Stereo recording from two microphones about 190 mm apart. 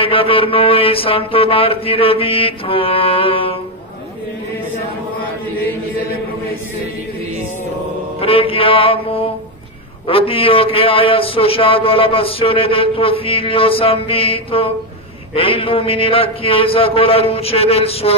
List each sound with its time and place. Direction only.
0.0 s a man's voice: 30° left (ahead or behind)
8.2 s a man's voice: 30° left (ahead or behind)